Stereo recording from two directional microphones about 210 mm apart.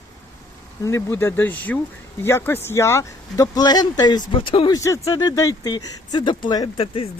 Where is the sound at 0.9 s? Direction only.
10° left (ahead or behind).